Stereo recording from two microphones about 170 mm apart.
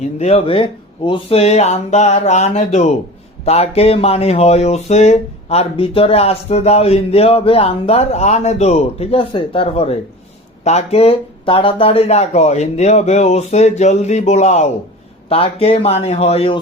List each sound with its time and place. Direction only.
0.2 s speech: 35° left (ahead or behind)